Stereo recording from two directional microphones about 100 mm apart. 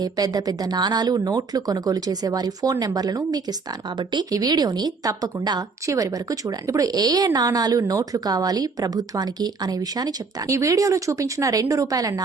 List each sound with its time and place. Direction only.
0.0 s a woman's voice: 40° right (ahead or behind)